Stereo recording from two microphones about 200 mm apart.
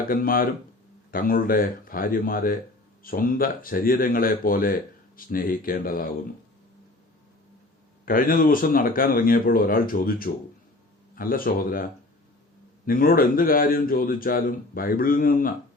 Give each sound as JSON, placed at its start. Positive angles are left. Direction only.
{"t": 0.0, "sound": "speech", "side_deg": 45}
{"t": 8.0, "sound": "speech", "side_deg": 45}